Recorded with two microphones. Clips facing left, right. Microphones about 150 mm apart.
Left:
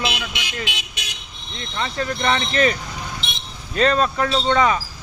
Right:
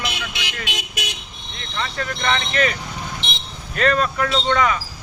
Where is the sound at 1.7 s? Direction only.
25° left (ahead or behind).